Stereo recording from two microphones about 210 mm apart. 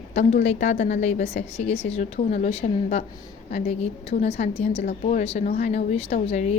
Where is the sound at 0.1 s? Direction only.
35° left (ahead or behind).